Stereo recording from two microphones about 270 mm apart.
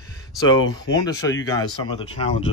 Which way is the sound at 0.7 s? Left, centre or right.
Centre.